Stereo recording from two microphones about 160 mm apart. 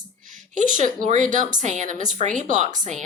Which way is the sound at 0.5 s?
50° right (ahead or behind).